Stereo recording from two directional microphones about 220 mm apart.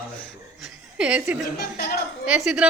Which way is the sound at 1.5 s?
45° left (ahead or behind).